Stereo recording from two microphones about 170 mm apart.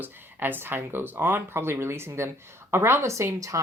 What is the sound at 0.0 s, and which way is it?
Speech, 10° right (ahead or behind).